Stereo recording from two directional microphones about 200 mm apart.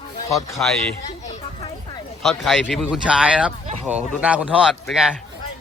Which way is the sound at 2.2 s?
Centre (ahead or behind).